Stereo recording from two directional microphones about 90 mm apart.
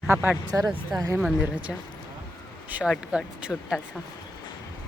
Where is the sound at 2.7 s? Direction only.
20° right (ahead or behind).